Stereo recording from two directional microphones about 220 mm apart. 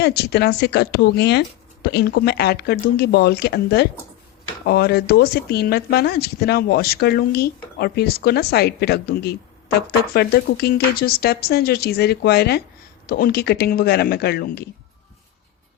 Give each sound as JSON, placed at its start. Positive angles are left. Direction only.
{"t": 0.0, "sound": "speech", "side_deg": 45}